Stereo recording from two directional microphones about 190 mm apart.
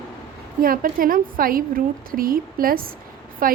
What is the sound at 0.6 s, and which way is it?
A woman's voice, 50° right (ahead or behind).